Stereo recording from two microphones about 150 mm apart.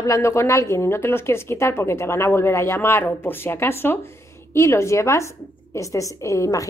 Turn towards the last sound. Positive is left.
turn(degrees=20)  # may be behind; listen again after turning